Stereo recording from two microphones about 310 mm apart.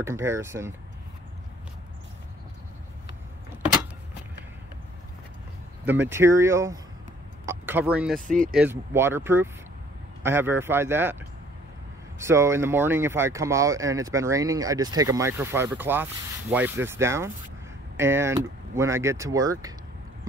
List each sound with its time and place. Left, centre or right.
0.0 s speech: centre
5.9 s speech: centre